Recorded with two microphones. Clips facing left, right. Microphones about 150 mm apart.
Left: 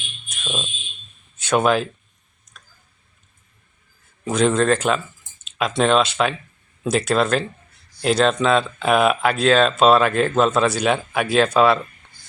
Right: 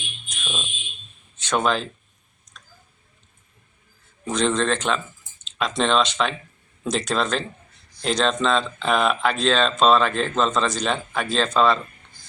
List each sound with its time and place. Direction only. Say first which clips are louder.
0.4 s speech: left 4 dB; 20° left (ahead or behind)
1.4 s speech: left 4 dB; 10° left (ahead or behind)
4.3 s speech: left 4 dB; 10° left (ahead or behind)